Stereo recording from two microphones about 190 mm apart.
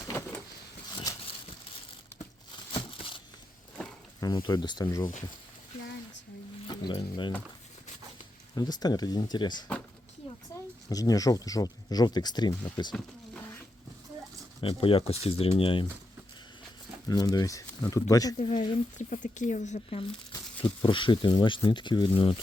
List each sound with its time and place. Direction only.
0.9 s a sound: 25° left (ahead or behind)
2.7 s a sound: 25° left (ahead or behind)
4.2 s speech: 20° left (ahead or behind)
6.7 s speech: 25° left (ahead or behind)
8.5 s speech: 20° left (ahead or behind)
10.8 s speech: 20° left (ahead or behind)
14.6 s speech: 30° left (ahead or behind)
17.3 s speech: 15° left (ahead or behind)
18.3 s speech: 35° left (ahead or behind)